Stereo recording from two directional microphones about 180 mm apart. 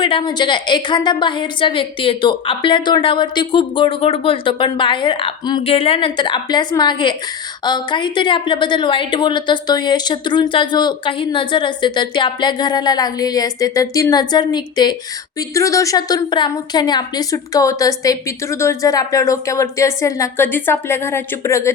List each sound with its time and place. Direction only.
0.0 s a woman's voice: 30° left (ahead or behind)